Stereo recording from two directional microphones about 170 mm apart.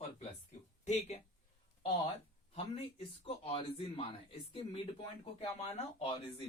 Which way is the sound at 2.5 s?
35° left (ahead or behind).